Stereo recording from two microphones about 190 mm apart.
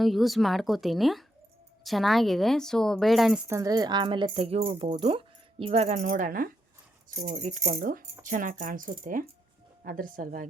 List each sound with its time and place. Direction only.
0.0 s a woman's voice: centre (ahead or behind)
3.4 s speech: 15° right (ahead or behind); by 10.4 s 45° right (ahead or behind)